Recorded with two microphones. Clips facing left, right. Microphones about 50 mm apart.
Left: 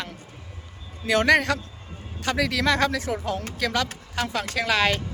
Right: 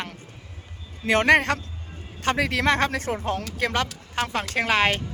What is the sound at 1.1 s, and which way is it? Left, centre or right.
Speech, right.